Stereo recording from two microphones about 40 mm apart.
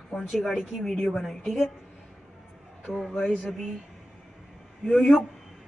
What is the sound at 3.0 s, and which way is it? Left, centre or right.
Speech, centre.